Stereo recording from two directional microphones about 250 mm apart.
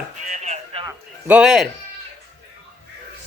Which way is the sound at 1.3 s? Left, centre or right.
Centre.